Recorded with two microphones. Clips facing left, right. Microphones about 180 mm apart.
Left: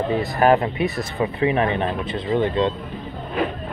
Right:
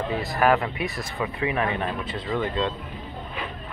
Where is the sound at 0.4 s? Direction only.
25° left (ahead or behind).